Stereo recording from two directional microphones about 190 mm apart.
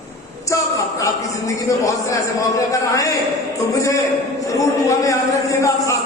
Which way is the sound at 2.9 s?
15° left (ahead or behind).